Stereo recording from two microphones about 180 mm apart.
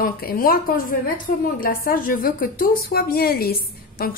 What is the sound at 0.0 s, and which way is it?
A woman's voice, 55° left (ahead or behind).